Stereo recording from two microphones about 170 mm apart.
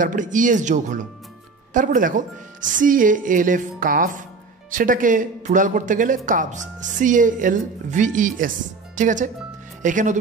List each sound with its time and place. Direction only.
0.0 s speech: 50° right (ahead or behind)